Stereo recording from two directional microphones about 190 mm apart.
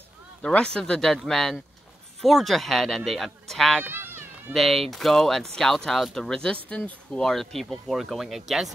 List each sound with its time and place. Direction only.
0.4 s speech: 5° left (ahead or behind)
3.8 s a sound: 10° right (ahead or behind)
4.6 s speech: centre (ahead or behind)